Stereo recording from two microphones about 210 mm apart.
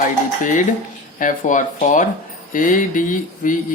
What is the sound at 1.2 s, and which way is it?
Speech, 40° left (ahead or behind).